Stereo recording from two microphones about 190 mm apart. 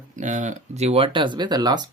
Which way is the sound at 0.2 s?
40° right (ahead or behind).